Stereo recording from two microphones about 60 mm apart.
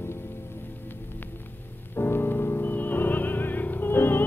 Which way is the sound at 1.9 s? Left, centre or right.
Left.